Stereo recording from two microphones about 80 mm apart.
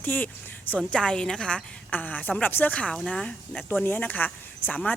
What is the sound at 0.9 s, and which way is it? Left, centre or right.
A woman's voice, centre.